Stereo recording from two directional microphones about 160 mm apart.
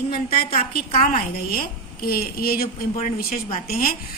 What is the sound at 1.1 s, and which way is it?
A woman's voice, 65° left (ahead or behind).